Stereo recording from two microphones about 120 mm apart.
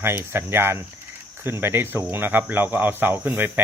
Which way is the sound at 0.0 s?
20° right (ahead or behind).